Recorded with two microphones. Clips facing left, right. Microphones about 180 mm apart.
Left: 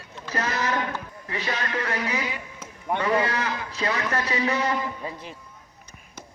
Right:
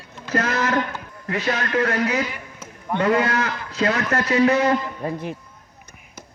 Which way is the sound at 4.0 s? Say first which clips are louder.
Right 9 dB; 45° right (ahead or behind).